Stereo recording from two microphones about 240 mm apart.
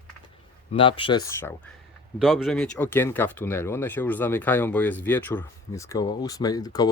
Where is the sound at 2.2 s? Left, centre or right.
Centre.